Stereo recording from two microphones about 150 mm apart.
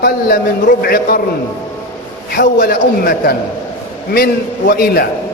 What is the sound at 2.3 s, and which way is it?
A man's voice, 85° left.